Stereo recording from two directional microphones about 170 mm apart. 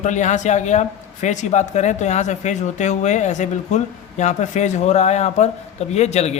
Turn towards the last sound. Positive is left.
turn(degrees=40)  # may be behind; listen again after turning